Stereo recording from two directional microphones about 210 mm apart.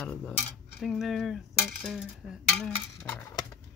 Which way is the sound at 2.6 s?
5° left (ahead or behind).